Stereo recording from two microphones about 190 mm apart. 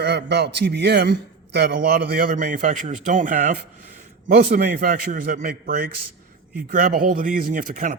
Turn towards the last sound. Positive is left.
turn(degrees=-45)  # may be behind; listen again after turning